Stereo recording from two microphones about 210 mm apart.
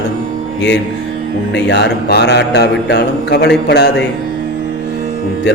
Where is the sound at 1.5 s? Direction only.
55° left (ahead or behind).